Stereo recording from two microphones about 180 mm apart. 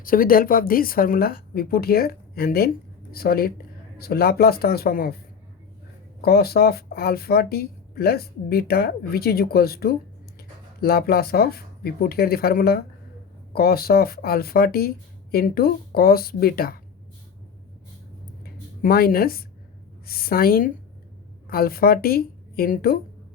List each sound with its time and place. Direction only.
0.0 s speech: 50° left (ahead or behind)
6.2 s speech: 60° left (ahead or behind)
18.8 s speech: 55° left (ahead or behind)